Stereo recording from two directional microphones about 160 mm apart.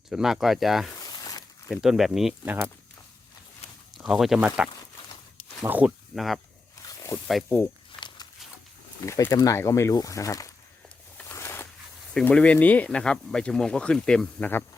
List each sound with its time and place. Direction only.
0.1 s speech: centre (ahead or behind)
0.9 s a sound: 25° left (ahead or behind)
1.7 s speech: centre (ahead or behind)
3.9 s speech: centre (ahead or behind)
6.1 s speech: centre (ahead or behind)
6.8 s zipper: 20° left (ahead or behind)
7.3 s speech: centre (ahead or behind)
7.9 s a sound: 30° left (ahead or behind)
9.0 s speech: 20° left (ahead or behind)
11.2 s a sound: 15° left (ahead or behind)
12.1 s speech: 5° left (ahead or behind)